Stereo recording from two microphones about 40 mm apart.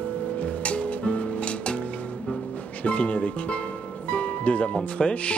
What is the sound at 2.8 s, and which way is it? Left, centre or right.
Speech, left.